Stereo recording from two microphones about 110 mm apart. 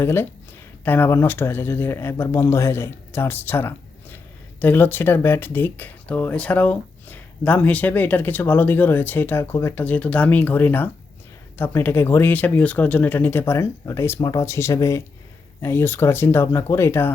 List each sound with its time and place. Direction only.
0.0 s speech: 20° left (ahead or behind)